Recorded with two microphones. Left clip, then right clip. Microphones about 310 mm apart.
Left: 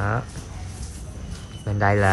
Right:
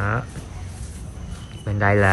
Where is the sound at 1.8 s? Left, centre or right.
Centre.